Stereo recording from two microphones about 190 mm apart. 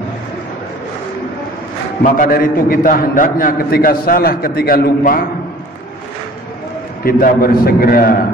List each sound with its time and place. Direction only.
2.1 s a man's voice: 50° left (ahead or behind)
7.0 s a man's voice: 50° left (ahead or behind)